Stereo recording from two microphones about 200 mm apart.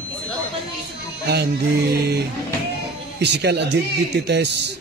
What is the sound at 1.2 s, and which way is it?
Music, 55° right (ahead or behind).